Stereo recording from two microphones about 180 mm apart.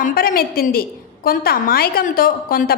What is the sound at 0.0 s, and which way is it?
A woman's voice, 55° left (ahead or behind).